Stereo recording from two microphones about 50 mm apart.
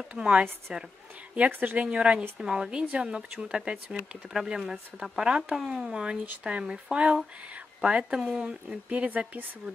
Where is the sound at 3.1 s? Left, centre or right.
Centre.